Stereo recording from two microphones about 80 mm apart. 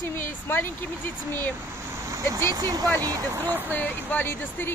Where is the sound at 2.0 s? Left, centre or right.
Right.